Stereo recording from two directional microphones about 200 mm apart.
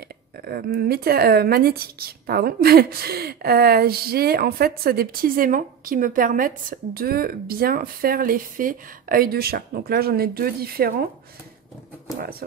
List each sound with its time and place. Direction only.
0.5 s a woman's voice: 50° right (ahead or behind)
12.2 s a woman's voice: 50° right (ahead or behind)